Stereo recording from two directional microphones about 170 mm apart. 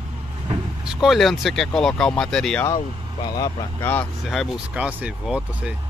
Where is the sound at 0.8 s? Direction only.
5° right (ahead or behind).